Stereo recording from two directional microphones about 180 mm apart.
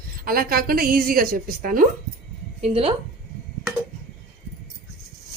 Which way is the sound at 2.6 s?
35° right (ahead or behind).